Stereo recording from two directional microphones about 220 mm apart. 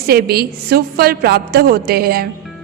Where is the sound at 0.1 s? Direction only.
45° right (ahead or behind).